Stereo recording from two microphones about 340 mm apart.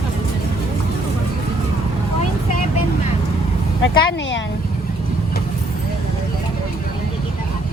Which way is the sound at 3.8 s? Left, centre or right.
Left.